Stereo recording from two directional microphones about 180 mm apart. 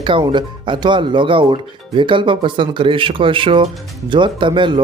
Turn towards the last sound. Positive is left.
turn(degrees=-25)  # may be behind; listen again after turning